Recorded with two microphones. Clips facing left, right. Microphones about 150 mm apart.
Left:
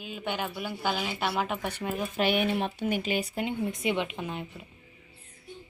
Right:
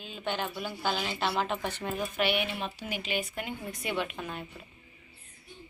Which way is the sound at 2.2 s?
45° left (ahead or behind).